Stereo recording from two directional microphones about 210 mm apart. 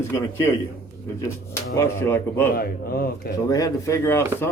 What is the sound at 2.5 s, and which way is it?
Speech, 45° left (ahead or behind).